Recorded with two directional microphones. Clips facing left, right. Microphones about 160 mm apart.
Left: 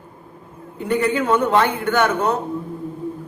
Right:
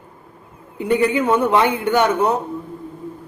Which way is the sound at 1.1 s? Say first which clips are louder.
Right 1 dB; 15° right (ahead or behind).